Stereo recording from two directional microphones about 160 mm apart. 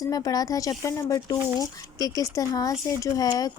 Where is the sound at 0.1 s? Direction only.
20° left (ahead or behind).